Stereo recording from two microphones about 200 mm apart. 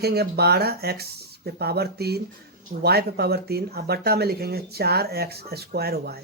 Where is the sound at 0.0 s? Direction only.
55° right (ahead or behind).